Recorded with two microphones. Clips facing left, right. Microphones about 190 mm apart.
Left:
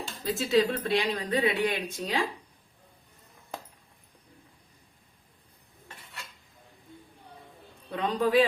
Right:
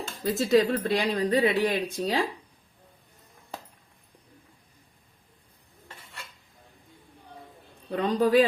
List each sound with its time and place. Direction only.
0.4 s speech: 40° right (ahead or behind)
7.9 s speech: 40° right (ahead or behind)